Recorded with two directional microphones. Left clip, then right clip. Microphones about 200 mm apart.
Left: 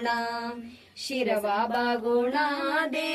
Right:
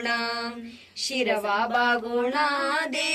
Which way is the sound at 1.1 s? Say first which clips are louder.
Right 1 dB; 35° left (ahead or behind).